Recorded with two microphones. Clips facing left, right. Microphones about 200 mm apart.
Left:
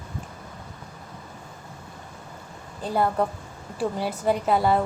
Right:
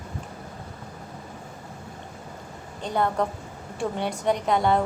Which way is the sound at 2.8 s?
5° left (ahead or behind).